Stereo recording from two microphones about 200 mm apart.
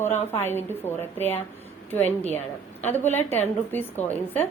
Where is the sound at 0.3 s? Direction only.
10° left (ahead or behind).